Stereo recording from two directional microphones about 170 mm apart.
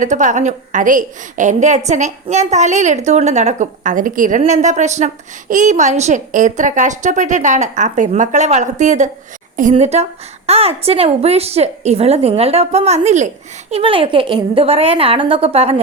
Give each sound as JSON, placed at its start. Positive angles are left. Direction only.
{"t": 0.0, "sound": "a woman's voice", "side_deg": -45}